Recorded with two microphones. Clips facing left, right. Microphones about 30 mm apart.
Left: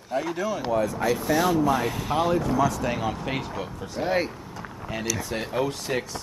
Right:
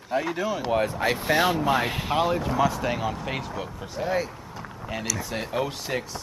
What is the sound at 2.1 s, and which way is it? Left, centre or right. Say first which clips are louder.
Speech: left 1 dB; centre.